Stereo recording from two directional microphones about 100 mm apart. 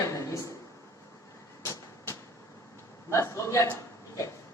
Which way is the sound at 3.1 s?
30° left (ahead or behind).